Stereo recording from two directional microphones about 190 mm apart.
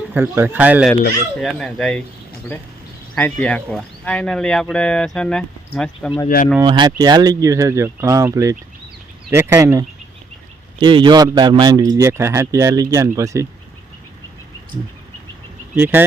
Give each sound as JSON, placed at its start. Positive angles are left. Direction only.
{"t": 0.1, "sound": "speech", "side_deg": -10}
{"t": 1.4, "sound": "speech", "side_deg": 0}
{"t": 6.2, "sound": "speech", "side_deg": 45}
{"t": 6.6, "sound": "speech", "side_deg": -20}
{"t": 15.7, "sound": "speech", "side_deg": -10}